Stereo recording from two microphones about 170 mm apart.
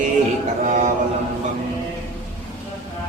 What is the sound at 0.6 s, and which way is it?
Speech, 50° right (ahead or behind).